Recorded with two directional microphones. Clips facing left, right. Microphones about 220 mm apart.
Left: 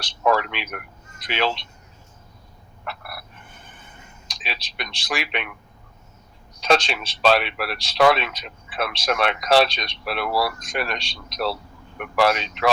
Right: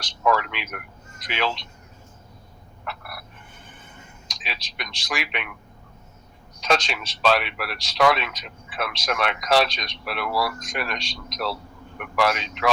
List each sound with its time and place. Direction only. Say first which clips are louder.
0.0 s speech: left 2 dB; 30° left (ahead or behind)
2.8 s frog: left 1 dB; 30° left (ahead or behind)
4.3 s speech: left 3 dB; 30° left (ahead or behind)
6.6 s speech: left 3 dB; 30° left (ahead or behind)